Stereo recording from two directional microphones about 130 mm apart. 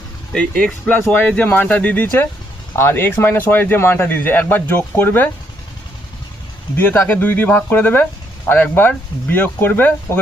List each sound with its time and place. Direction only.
0.3 s speech: 10° left (ahead or behind)
6.7 s speech: 20° left (ahead or behind)